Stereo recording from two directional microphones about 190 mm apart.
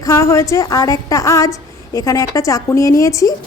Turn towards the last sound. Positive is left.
turn(degrees=15)  # may be behind; listen again after turning